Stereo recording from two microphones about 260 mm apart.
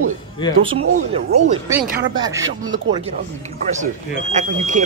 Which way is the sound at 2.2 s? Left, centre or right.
Centre.